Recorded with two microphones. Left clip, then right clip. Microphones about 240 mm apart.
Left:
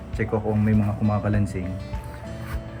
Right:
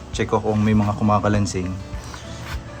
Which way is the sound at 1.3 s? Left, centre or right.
Right.